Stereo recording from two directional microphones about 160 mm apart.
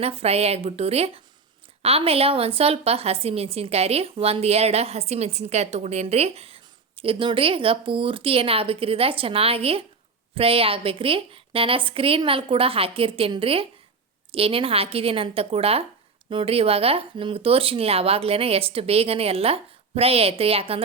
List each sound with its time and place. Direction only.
0.0 s a woman's voice: 40° right (ahead or behind)